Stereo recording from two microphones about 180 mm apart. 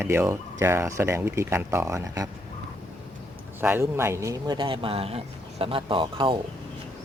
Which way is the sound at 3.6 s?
15° right (ahead or behind).